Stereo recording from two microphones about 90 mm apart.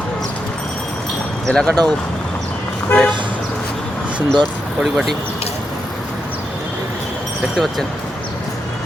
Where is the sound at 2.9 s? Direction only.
25° left (ahead or behind).